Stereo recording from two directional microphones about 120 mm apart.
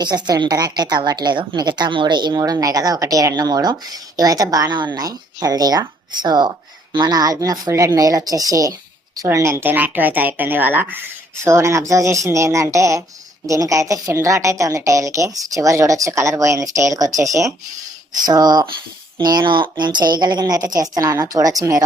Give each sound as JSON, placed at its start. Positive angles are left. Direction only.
{"t": 0.0, "sound": "a woman's voice", "side_deg": -35}